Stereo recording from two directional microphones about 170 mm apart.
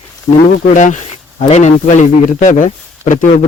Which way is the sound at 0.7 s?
45° left (ahead or behind).